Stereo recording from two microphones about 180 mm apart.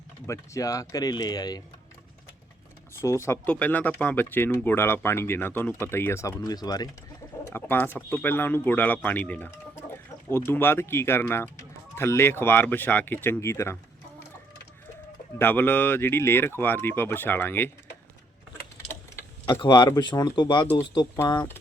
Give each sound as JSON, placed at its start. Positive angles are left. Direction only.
{"t": 0.3, "sound": "speech", "side_deg": 20}
{"t": 2.9, "sound": "speech", "side_deg": 15}
{"t": 15.4, "sound": "speech", "side_deg": 10}
{"t": 19.5, "sound": "speech", "side_deg": 25}